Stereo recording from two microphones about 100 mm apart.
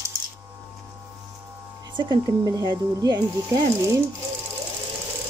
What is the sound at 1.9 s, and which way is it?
Speech, 50° right (ahead or behind).